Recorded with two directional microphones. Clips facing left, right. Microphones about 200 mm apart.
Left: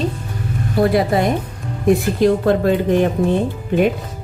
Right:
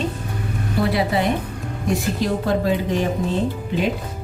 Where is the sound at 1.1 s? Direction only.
45° left (ahead or behind).